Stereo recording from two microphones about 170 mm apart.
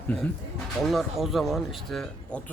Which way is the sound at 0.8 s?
Centre (ahead or behind).